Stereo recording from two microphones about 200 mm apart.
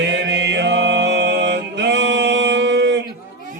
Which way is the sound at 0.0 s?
60° right (ahead or behind).